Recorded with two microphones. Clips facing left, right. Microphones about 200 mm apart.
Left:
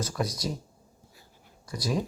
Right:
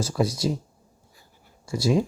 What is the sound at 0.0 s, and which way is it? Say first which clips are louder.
Speech: right 6 dB; 30° right (ahead or behind).